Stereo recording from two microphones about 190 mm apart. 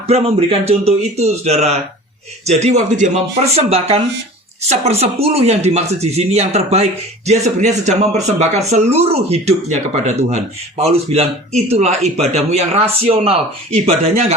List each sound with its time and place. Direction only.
0.1 s speech: 30° right (ahead or behind)